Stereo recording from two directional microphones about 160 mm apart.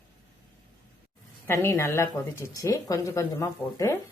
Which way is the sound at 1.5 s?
15° left (ahead or behind).